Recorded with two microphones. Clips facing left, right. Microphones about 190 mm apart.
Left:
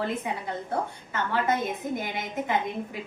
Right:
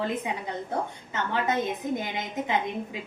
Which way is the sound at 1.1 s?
20° right (ahead or behind).